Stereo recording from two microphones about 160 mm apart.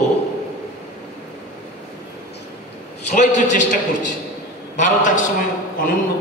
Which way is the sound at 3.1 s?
50° left (ahead or behind).